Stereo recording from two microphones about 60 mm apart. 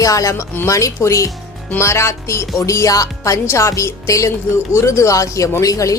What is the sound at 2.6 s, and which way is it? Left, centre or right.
Speech, left.